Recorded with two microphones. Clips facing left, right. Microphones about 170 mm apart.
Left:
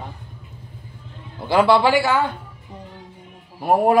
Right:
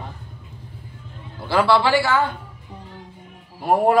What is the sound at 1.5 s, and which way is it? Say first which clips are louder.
Speech: left 2 dB; 20° left (ahead or behind).